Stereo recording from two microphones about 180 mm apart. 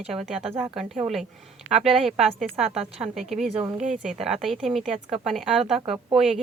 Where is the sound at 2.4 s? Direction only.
Centre (ahead or behind).